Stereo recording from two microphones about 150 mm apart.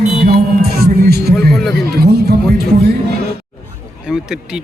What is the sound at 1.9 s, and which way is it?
Speech, 90° right.